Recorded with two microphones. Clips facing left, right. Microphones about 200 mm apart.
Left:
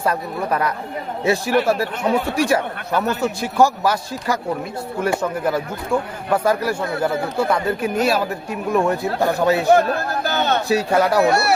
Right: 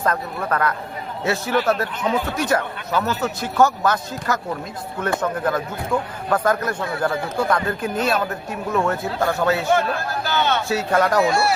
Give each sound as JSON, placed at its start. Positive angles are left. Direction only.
{"t": 0.0, "sound": "speech", "side_deg": 10}
{"t": 9.6, "sound": "speech", "side_deg": 40}
{"t": 10.7, "sound": "speech", "side_deg": 10}
{"t": 11.3, "sound": "speech", "side_deg": 70}